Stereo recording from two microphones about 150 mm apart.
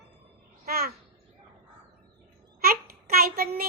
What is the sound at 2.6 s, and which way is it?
Child singing, 85° right.